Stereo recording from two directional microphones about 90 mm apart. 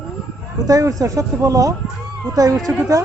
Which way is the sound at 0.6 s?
40° right (ahead or behind).